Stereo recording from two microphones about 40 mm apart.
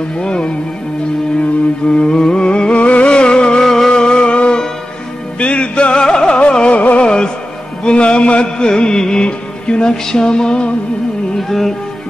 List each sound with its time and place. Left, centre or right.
0.2 s music: left
1.9 s music: left
6.7 s music: left
7.0 s music: left
11.3 s music: centre